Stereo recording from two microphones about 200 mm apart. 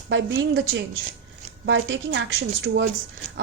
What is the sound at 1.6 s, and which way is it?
Speech, 65° right (ahead or behind).